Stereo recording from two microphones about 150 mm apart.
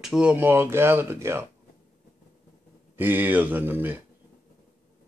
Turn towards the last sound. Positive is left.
turn(degrees=-15)  # may be behind; listen again after turning